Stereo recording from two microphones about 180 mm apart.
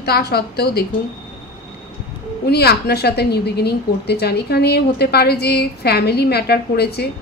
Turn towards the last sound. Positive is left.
turn(degrees=65)  # may be behind; listen again after turning